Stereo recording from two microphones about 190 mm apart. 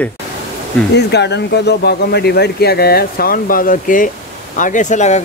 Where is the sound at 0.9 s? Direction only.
65° left (ahead or behind).